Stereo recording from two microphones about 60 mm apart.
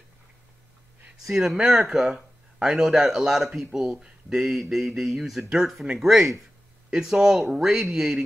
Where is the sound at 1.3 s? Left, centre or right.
Centre.